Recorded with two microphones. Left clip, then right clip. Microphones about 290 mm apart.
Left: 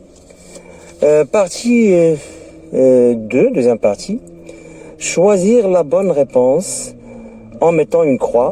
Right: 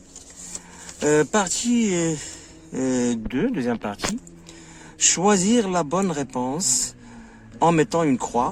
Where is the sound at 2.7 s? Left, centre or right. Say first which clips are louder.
Left 15 dB; right.